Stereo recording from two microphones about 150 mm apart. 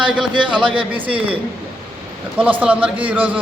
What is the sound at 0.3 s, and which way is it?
Speech, 35° right (ahead or behind).